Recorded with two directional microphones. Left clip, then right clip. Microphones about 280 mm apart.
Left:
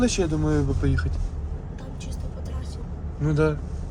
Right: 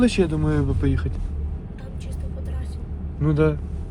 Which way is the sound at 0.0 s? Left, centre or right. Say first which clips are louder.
Right 3 dB; right.